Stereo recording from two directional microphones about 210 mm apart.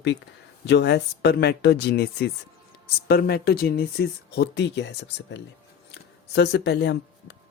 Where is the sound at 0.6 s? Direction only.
55° left (ahead or behind).